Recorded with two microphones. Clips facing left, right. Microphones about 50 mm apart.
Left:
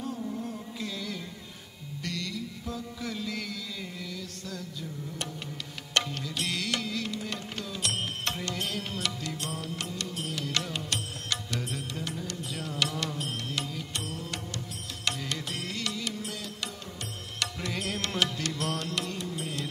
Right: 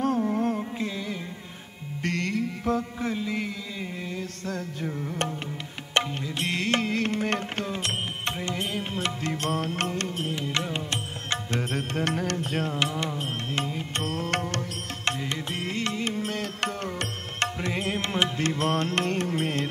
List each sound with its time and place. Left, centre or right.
0.0 s music: right
0.7 s music: right
2.0 s music: right
3.0 s mantra: right
4.2 s music: right
5.9 s music: right
8.3 s music: right
10.2 s music: right
11.5 s music: right
12.7 s music: right
15.0 s music: right
17.4 s music: right